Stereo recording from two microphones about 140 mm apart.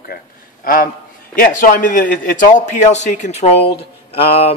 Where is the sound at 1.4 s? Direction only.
75° left (ahead or behind).